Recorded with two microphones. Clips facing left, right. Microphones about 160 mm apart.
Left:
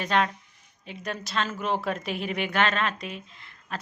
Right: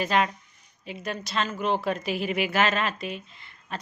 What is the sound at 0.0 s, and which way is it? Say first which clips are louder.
Speech: right 1 dB; 5° right (ahead or behind).